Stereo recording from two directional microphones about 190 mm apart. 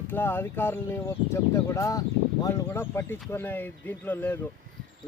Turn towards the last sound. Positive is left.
turn(degrees=10)  # may be behind; listen again after turning